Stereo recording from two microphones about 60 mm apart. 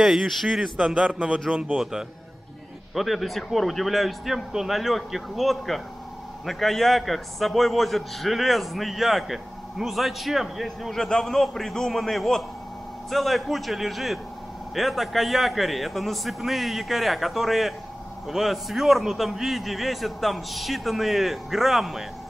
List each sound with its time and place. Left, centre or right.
0.0 s a man's voice: centre
0.5 s a man's voice: centre